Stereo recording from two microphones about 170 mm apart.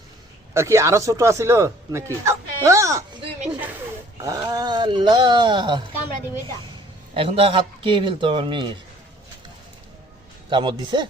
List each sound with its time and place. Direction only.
0.5 s speech: 15° right (ahead or behind)
3.5 s snake: 10° right (ahead or behind)
4.2 s speech: 20° right (ahead or behind)
7.1 s a man's voice: 35° right (ahead or behind)
10.5 s a man's voice: 30° right (ahead or behind)